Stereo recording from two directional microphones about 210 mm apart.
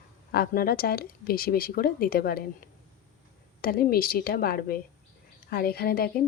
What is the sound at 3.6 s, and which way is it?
A woman's voice, 45° left (ahead or behind).